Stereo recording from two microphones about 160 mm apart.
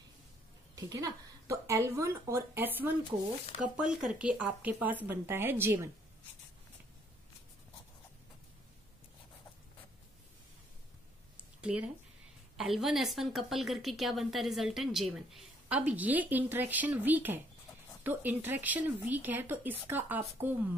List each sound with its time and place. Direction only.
0.7 s speech: 20° right (ahead or behind)
11.6 s a woman's voice: 10° right (ahead or behind)